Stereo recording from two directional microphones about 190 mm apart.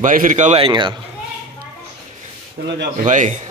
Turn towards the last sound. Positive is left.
turn(degrees=-40)  # may be behind; listen again after turning